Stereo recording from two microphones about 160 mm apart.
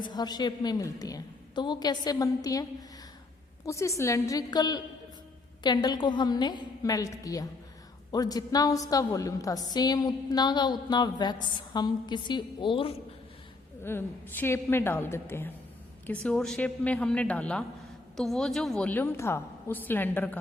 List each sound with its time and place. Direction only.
0.0 s a woman's voice: 25° left (ahead or behind)
3.7 s a woman's voice: 20° left (ahead or behind)
13.8 s a woman's voice: 15° left (ahead or behind)